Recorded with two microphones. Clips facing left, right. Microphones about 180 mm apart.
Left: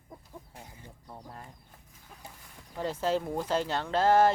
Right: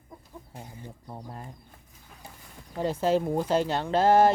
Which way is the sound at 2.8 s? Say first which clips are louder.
Right 5 dB; 15° right (ahead or behind).